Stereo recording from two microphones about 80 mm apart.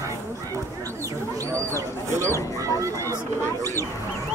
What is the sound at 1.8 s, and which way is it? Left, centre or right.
Speech, right.